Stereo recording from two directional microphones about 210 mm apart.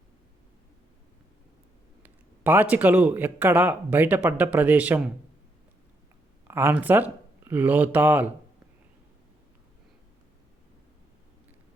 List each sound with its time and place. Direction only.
2.4 s speech: 10° right (ahead or behind)
6.5 s speech: 10° right (ahead or behind)